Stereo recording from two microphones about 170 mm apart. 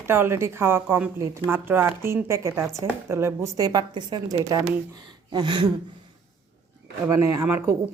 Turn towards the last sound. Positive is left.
turn(degrees=-15)  # may be behind; listen again after turning